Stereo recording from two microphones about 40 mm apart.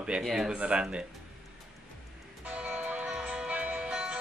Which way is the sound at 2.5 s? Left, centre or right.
Right.